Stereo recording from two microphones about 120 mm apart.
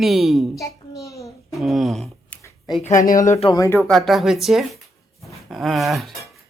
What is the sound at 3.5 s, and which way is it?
Speech, 25° left (ahead or behind).